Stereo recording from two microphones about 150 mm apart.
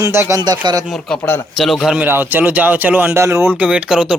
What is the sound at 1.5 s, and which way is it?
A man's voice, centre (ahead or behind).